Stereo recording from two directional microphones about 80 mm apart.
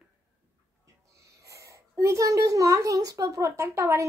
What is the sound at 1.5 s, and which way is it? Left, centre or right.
A child's voice, right.